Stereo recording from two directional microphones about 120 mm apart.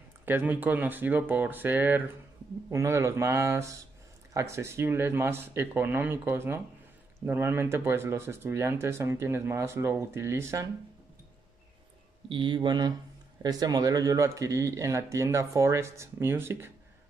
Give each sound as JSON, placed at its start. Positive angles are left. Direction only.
{"t": 0.2, "sound": "speech", "side_deg": -15}
{"t": 12.3, "sound": "speech", "side_deg": -40}